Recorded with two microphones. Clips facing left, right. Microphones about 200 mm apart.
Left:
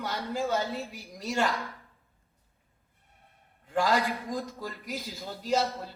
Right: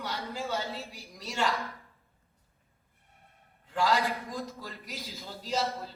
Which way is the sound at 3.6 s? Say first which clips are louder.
Left 1 dB; 50° left (ahead or behind).